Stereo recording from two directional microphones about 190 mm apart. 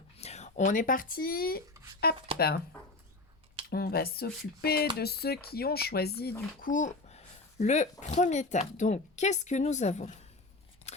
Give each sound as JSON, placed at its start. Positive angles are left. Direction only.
{"t": 0.2, "sound": "speech", "side_deg": 35}
{"t": 3.7, "sound": "speech", "side_deg": 55}
{"t": 6.6, "sound": "a woman's voice", "side_deg": 45}